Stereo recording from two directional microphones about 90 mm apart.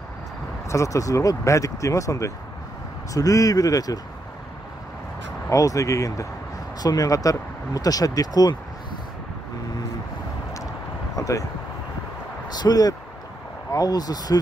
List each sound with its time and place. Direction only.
0.7 s speech: 35° left (ahead or behind)
5.5 s speech: 40° left (ahead or behind)
11.1 s a sound: 40° left (ahead or behind)
12.4 s speech: 50° left (ahead or behind)